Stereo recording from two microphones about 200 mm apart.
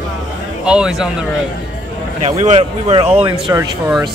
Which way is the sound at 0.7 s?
5° right (ahead or behind).